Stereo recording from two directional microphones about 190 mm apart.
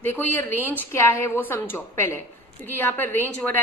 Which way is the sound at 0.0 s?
10° left (ahead or behind).